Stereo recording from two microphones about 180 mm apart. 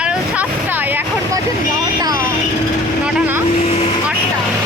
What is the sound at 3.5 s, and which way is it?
Vehicle, 35° left (ahead or behind).